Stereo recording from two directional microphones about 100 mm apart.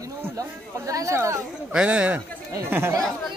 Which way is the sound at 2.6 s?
25° right (ahead or behind).